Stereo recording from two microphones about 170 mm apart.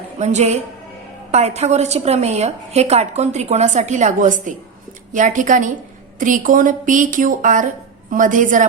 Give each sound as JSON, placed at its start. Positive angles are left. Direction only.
{"t": 0.2, "sound": "a woman's voice", "side_deg": -40}